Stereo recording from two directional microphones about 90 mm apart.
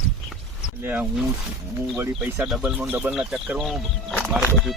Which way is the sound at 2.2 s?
5° right (ahead or behind).